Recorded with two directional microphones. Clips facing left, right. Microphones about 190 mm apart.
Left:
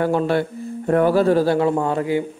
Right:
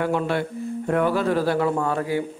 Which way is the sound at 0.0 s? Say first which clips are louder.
Left 4 dB; 35° left (ahead or behind).